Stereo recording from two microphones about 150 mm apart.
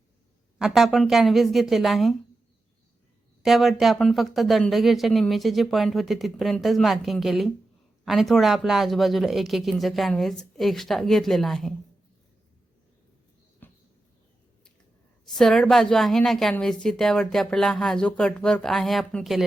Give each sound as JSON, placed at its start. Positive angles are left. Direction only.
{"t": 0.6, "sound": "a woman's voice", "side_deg": 0}
{"t": 3.4, "sound": "a woman's voice", "side_deg": 0}
{"t": 13.6, "sound": "mouse", "side_deg": 15}
{"t": 15.2, "sound": "a woman's voice", "side_deg": 0}